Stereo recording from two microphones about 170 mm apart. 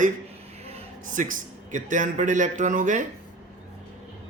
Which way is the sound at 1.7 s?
50° right (ahead or behind).